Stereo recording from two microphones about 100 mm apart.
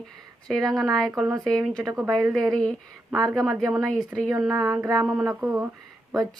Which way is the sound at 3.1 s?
35° right (ahead or behind).